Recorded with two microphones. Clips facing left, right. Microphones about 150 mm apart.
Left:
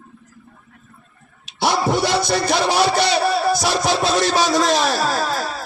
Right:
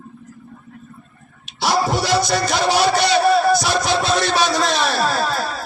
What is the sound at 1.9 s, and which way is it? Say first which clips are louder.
Music: even; 55° left (ahead or behind).